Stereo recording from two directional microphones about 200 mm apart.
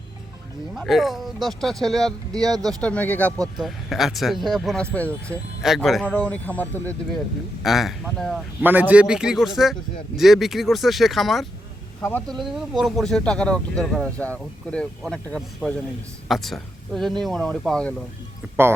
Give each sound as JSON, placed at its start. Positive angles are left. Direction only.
{"t": 0.7, "sound": "speech", "side_deg": 0}
{"t": 2.4, "sound": "speech", "side_deg": -20}
{"t": 2.8, "sound": "speech", "side_deg": 5}